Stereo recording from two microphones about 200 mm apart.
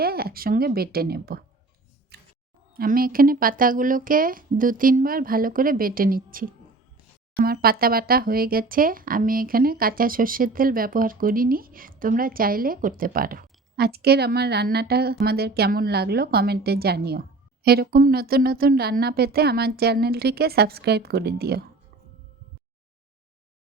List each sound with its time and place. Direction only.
0.0 s speech: 50° right (ahead or behind)
2.1 s a sound: 55° right (ahead or behind)
2.7 s speech: 45° right (ahead or behind)